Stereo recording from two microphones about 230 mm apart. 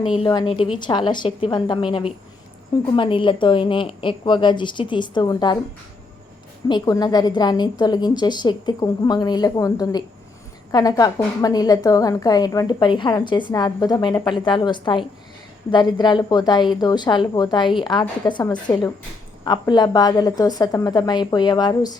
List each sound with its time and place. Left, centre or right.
0.2 s a woman's voice: left
6.7 s a woman's voice: centre